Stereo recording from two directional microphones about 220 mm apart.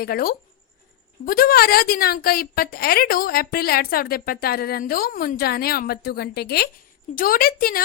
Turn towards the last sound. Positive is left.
turn(degrees=40)  # may be behind; listen again after turning